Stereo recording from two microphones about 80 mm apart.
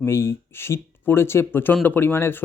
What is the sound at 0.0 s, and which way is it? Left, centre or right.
Speech, left.